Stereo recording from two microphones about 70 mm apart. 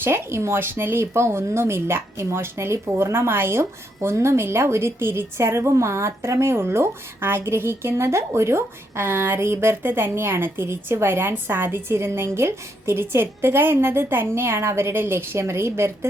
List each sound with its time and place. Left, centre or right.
0.0 s speech: right